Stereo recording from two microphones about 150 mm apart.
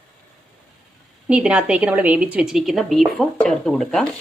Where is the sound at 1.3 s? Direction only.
10° right (ahead or behind).